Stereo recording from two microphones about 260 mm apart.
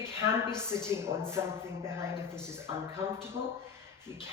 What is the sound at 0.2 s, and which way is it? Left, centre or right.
A woman's voice, centre.